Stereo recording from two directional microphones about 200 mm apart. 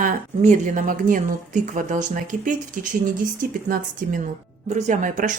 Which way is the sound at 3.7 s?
40° right (ahead or behind).